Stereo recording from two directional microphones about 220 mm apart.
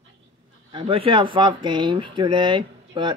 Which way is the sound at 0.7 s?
25° right (ahead or behind).